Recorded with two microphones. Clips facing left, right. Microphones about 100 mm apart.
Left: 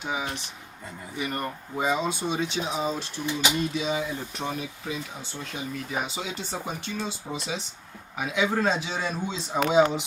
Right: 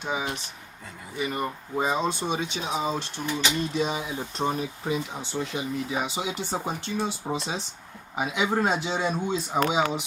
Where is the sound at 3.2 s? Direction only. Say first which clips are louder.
Even; 40° right (ahead or behind).